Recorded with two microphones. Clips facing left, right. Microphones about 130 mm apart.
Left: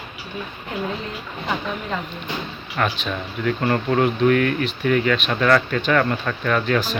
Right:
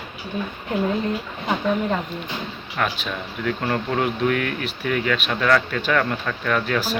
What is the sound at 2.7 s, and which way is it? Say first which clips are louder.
Speech: left 2 dB; 5° right (ahead or behind).